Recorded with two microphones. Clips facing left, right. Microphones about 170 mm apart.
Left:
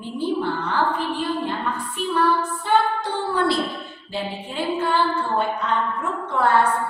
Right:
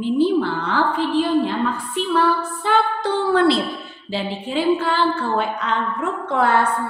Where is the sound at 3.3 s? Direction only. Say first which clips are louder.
Right 4 dB; 90° right.